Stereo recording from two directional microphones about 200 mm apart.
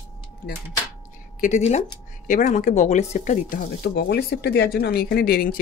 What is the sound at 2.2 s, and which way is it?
Speech, 40° left (ahead or behind).